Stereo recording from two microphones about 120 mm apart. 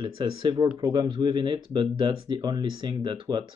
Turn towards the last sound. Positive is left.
turn(degrees=-40)  # may be behind; listen again after turning